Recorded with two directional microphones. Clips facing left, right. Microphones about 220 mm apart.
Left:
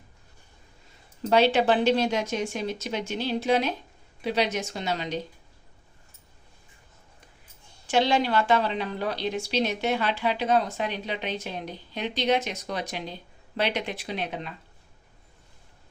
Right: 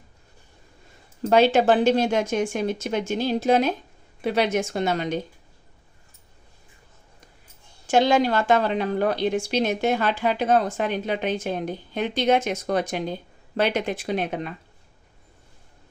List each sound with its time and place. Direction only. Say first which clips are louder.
1.3 s a woman's voice: right 3 dB; 45° right (ahead or behind)
7.9 s a woman's voice: right 4 dB; 45° right (ahead or behind)